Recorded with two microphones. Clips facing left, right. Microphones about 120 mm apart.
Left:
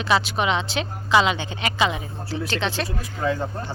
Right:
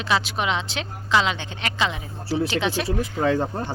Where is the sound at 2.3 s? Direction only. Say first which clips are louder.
Right 2 dB; 10° right (ahead or behind).